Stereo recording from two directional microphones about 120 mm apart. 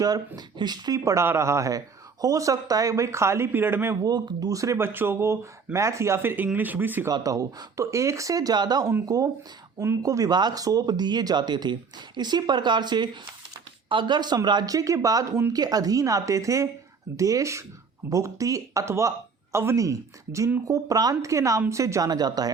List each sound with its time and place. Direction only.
0.0 s speech: 35° right (ahead or behind); by 3.9 s 20° right (ahead or behind)
4.0 s speech: 35° right (ahead or behind); by 7.1 s 15° right (ahead or behind)
7.1 s speech: 30° right (ahead or behind)